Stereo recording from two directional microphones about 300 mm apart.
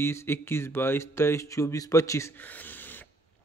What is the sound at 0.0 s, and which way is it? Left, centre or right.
Speech, centre.